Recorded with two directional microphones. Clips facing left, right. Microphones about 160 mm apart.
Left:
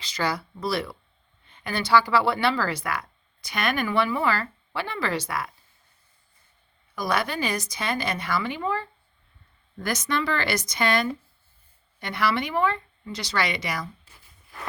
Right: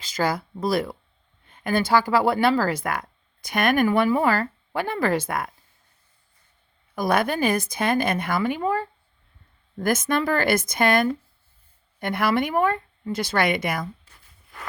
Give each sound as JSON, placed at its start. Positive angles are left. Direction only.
{"t": 0.0, "sound": "speech", "side_deg": -45}
{"t": 6.9, "sound": "speech", "side_deg": -50}